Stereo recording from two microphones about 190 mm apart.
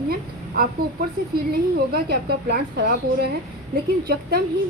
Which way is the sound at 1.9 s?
55° right (ahead or behind).